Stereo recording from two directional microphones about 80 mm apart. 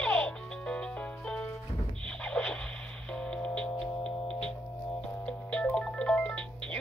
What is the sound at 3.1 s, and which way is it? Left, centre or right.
Music, centre.